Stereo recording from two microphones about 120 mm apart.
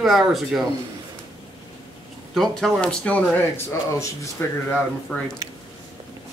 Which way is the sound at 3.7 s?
25° left (ahead or behind).